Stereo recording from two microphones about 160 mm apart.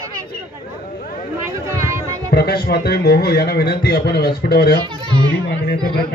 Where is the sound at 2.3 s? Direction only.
90° left.